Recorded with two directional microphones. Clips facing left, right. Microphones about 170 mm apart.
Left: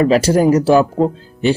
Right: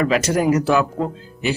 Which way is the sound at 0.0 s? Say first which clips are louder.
Left 6 dB; 30° left (ahead or behind).